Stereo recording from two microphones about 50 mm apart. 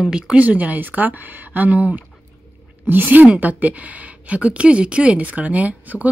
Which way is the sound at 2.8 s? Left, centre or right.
Right.